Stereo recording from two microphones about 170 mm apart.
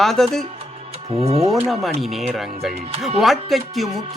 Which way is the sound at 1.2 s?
35° right (ahead or behind).